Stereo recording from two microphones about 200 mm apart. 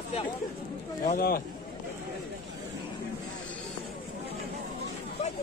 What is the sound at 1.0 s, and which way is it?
Speech, 45° left (ahead or behind).